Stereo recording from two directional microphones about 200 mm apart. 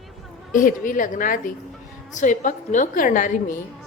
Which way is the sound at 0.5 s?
40° left (ahead or behind).